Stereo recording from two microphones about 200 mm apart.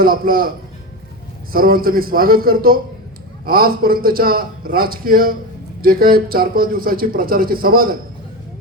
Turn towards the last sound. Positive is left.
turn(degrees=-45)  # may be behind; listen again after turning